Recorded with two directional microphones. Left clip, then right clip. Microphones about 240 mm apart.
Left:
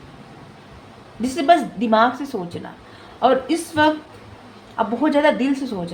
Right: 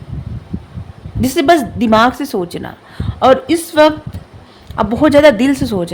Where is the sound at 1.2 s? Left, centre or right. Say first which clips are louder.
Right 5 dB; right.